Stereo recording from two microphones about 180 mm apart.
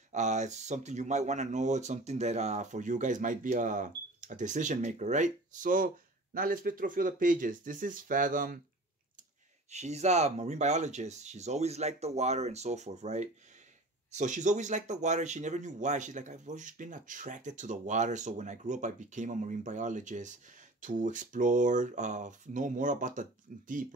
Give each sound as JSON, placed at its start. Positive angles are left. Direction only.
{"t": 0.1, "sound": "speech", "side_deg": -40}
{"t": 9.7, "sound": "speech", "side_deg": -40}